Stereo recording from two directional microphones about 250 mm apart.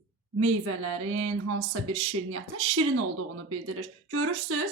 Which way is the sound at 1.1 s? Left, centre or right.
Right.